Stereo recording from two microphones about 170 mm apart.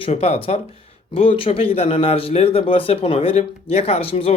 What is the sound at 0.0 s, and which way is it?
A man's voice, 40° left (ahead or behind).